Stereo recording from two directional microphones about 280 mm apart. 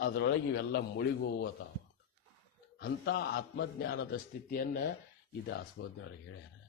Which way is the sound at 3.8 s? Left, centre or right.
Left.